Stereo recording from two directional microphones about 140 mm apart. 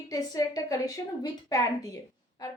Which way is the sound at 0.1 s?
25° left (ahead or behind).